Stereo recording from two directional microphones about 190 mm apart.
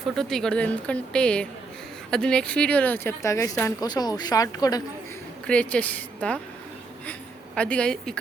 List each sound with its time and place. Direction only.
0.0 s speech: centre (ahead or behind); by 4.8 s 20° left (ahead or behind)
5.5 s speech: 5° left (ahead or behind)